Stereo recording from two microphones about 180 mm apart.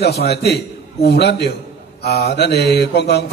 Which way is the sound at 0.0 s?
60° left (ahead or behind).